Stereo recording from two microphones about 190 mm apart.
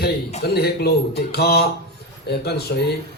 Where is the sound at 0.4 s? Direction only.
55° left (ahead or behind).